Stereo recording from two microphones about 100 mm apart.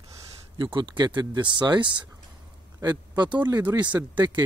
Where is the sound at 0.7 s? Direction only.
50° right (ahead or behind).